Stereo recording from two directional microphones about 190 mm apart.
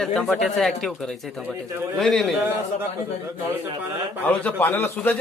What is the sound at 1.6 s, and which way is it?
Speech, 15° right (ahead or behind).